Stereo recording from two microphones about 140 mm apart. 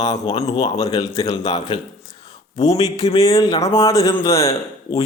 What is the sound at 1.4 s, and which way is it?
Mantra, 30° left (ahead or behind).